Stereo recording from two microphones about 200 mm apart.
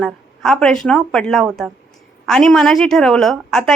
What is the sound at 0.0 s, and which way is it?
A woman's voice, 5° left (ahead or behind).